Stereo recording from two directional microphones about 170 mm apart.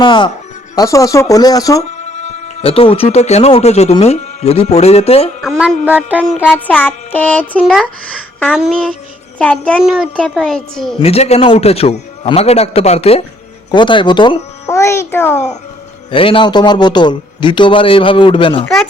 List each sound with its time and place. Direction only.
0.0 s a man's voice: 30° left (ahead or behind)
1.8 s a man's voice: 40° left (ahead or behind)
5.4 s music: 5° right (ahead or behind)
6.3 s child singing: 10° left (ahead or behind)
7.6 s a child's voice: centre (ahead or behind)
9.4 s child singing: 5° left (ahead or behind)
9.8 s a child's voice: 5° right (ahead or behind)
10.9 s a man's voice: 35° left (ahead or behind)
14.7 s child singing: 15° left (ahead or behind)
16.1 s a man's voice: 30° left (ahead or behind)